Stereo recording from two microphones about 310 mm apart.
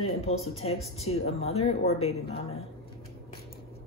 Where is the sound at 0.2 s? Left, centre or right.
Centre.